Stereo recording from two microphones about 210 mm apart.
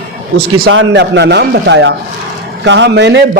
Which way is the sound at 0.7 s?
60° right (ahead or behind).